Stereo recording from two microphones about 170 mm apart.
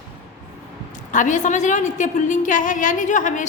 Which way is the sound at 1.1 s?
45° left (ahead or behind).